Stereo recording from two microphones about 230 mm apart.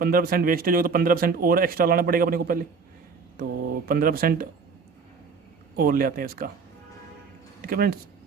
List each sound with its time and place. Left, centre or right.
0.0 s speech: right
5.7 s speech: right
7.7 s speech: right